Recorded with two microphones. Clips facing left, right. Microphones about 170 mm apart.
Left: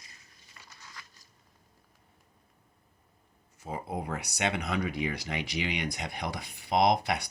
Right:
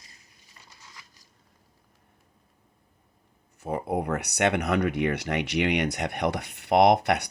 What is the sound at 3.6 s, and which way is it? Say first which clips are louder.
Speech: right 7 dB; 65° right (ahead or behind).